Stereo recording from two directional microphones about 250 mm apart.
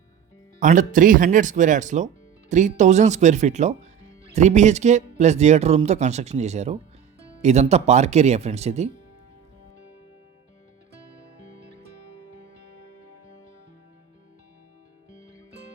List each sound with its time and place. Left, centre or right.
0.6 s speech: right